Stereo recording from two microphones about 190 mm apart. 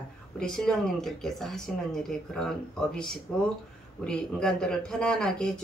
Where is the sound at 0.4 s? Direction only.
Centre (ahead or behind).